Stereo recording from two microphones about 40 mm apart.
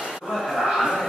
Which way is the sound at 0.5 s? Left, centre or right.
Centre.